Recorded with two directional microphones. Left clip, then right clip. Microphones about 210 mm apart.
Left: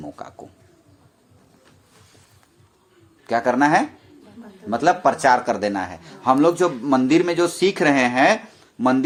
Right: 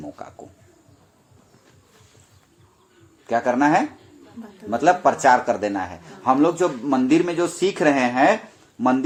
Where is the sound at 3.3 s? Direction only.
30° left (ahead or behind).